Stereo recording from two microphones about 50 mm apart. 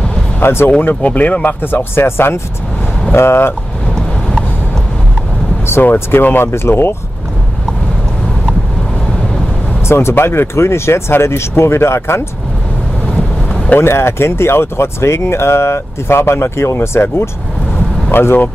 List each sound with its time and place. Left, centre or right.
0.4 s speech: left
0.7 s speech: left
1.6 s speech: left
5.7 s vehicle: left
6.2 s speech: left
9.8 s speech: left
13.7 s speech: left
18.1 s speech: left